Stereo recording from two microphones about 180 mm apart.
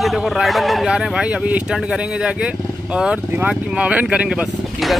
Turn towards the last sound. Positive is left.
turn(degrees=-5)  # may be behind; listen again after turning